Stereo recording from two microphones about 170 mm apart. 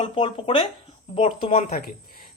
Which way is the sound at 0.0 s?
30° left (ahead or behind).